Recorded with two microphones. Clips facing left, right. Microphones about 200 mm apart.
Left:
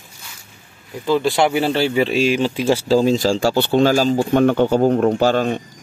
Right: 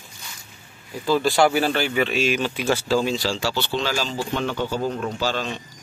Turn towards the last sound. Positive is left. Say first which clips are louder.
# left 9 dB
turn(degrees=50)  # may be behind; listen again after turning